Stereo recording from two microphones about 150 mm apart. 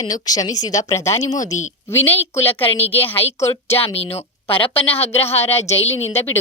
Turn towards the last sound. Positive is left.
turn(degrees=45)  # may be behind; listen again after turning